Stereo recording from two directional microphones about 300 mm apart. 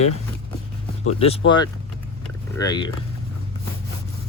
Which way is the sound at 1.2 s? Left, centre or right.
Centre.